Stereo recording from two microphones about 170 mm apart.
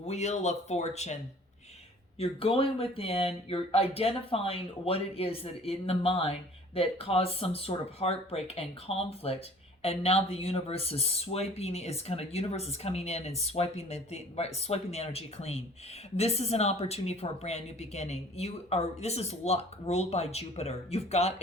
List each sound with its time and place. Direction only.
0.0 s speech: 40° left (ahead or behind)
2.1 s speech: 35° left (ahead or behind)